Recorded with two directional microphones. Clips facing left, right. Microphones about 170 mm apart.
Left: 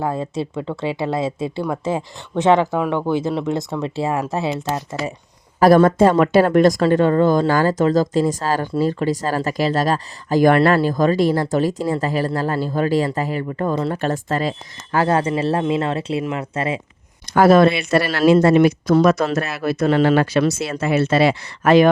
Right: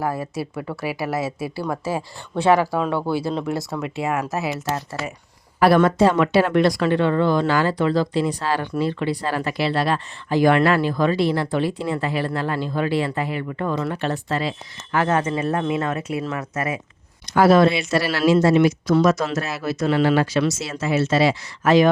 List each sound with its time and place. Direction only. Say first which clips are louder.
0.0 s speech: left 3 dB; 25° left (ahead or behind)
3.8 s speech: left 2 dB; 30° left (ahead or behind)
5.5 s speech: left 4 dB; 40° left (ahead or behind)
13.9 s speech: left 3 dB; 45° left (ahead or behind)
14.9 s speech: left 3 dB; 35° left (ahead or behind)
17.3 s speech: left 2 dB; 50° left (ahead or behind)